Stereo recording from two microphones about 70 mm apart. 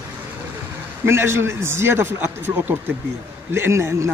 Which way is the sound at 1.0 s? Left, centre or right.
Right.